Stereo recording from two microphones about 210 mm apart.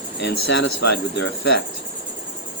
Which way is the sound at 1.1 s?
55° left (ahead or behind).